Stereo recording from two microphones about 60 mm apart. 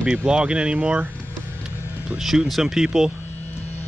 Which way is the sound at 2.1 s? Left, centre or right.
Centre.